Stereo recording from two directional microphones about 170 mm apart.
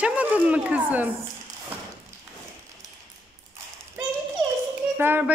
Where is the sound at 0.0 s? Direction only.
10° right (ahead or behind).